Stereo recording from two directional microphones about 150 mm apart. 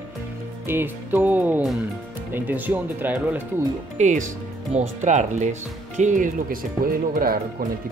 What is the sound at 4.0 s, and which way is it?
Speech, 55° right (ahead or behind).